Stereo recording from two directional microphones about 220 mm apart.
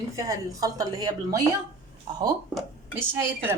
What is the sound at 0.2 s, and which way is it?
A woman's voice, 15° right (ahead or behind).